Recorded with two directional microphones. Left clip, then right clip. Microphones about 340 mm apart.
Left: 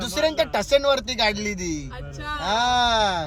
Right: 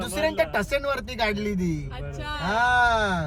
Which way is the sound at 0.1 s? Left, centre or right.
Left.